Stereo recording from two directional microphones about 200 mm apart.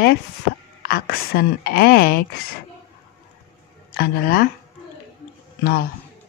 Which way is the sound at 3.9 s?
50° left (ahead or behind).